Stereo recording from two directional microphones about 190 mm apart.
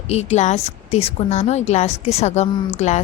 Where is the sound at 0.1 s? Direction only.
35° left (ahead or behind).